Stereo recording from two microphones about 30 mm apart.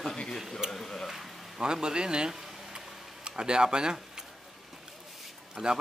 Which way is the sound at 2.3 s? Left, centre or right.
Centre.